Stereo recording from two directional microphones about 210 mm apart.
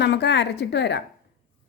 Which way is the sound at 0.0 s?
55° left (ahead or behind).